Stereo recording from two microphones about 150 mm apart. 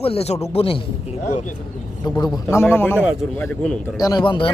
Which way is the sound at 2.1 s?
25° left (ahead or behind).